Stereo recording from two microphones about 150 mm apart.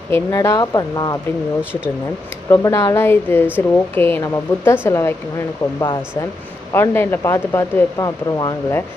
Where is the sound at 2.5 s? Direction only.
20° left (ahead or behind).